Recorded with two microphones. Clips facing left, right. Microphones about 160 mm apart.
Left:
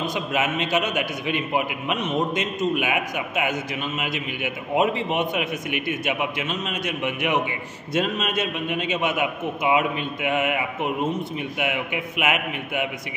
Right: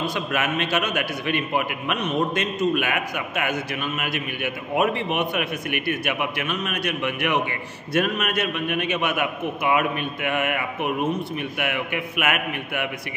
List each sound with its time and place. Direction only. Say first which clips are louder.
0.0 s a man's voice: left 1 dB; 20° left (ahead or behind)